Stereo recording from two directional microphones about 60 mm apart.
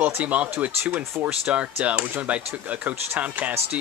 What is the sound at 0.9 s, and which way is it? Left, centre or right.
Speech, right.